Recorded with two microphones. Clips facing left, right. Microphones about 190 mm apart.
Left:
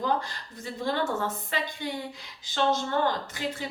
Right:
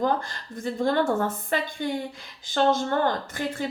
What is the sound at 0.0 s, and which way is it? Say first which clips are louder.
A woman's voice: right 3 dB; 50° right (ahead or behind).